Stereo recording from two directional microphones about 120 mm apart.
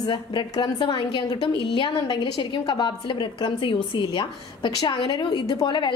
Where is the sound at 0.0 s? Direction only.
40° left (ahead or behind).